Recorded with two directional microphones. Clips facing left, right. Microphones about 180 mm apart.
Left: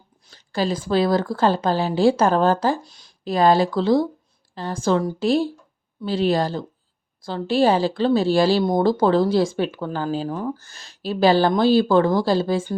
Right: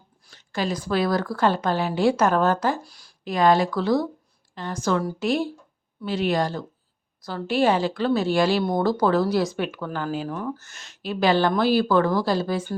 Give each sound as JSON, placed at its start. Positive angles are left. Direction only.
{"t": 0.5, "sound": "speech", "side_deg": 30}
{"t": 3.2, "sound": "a woman's voice", "side_deg": 30}